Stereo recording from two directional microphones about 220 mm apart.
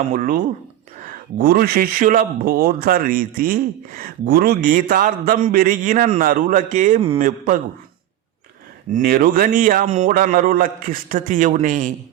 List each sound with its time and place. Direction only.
0.1 s a man's voice: 40° right (ahead or behind)
8.9 s a man's voice: 40° right (ahead or behind)